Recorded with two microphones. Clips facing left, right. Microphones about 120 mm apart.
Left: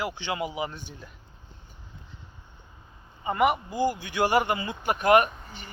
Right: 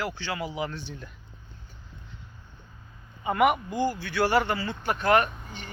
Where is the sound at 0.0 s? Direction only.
15° left (ahead or behind).